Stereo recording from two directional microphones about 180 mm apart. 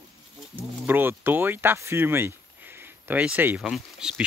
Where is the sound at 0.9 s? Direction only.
10° right (ahead or behind).